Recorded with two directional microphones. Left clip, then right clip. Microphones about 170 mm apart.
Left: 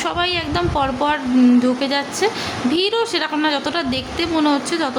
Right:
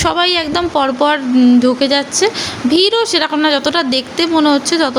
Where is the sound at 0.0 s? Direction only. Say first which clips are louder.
Right 7 dB; 35° right (ahead or behind).